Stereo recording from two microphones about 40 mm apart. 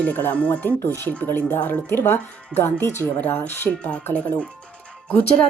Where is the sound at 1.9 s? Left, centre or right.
Left.